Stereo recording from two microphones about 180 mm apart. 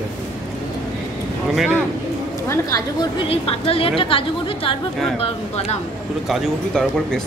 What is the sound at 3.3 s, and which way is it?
A woman's voice, 30° left (ahead or behind).